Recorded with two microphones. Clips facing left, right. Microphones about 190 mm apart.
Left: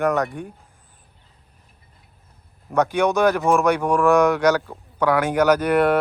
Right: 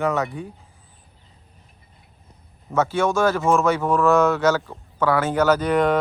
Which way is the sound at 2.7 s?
15° left (ahead or behind).